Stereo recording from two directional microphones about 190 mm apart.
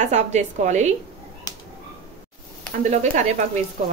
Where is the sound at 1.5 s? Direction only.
20° left (ahead or behind).